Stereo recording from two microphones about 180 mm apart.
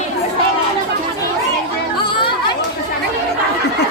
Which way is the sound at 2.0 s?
25° left (ahead or behind).